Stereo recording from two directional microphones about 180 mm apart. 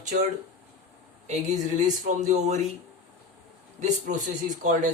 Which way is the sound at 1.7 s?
45° right (ahead or behind).